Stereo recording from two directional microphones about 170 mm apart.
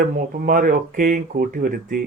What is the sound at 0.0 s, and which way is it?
Speech, 55° right (ahead or behind).